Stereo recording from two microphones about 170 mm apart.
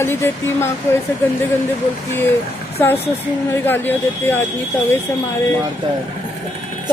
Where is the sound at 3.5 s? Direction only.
10° left (ahead or behind).